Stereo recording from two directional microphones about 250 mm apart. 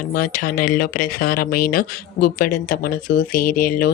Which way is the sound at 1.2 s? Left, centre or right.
Left.